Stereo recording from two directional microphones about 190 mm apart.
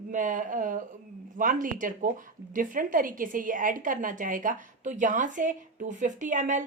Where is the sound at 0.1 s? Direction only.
45° right (ahead or behind).